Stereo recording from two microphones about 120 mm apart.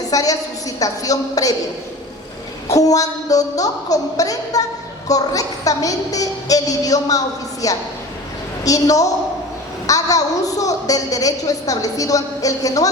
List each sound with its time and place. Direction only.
0.1 s a woman's voice: 30° left (ahead or behind)
2.6 s a woman's voice: 30° left (ahead or behind)